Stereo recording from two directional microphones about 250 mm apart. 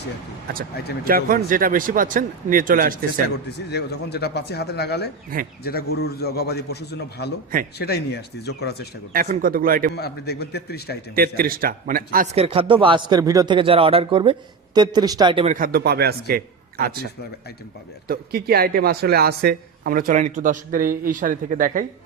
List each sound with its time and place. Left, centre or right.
1.0 s speech: right
3.2 s speech: left
9.1 s speech: right
9.9 s speech: left
11.1 s a man's voice: right; by 15.5 s centre
15.5 s speech: right
18.1 s speech: right